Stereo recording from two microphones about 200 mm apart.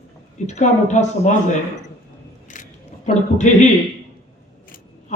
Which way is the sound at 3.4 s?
35° left (ahead or behind).